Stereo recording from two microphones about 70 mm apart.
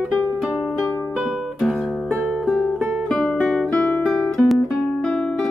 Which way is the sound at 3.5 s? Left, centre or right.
Centre.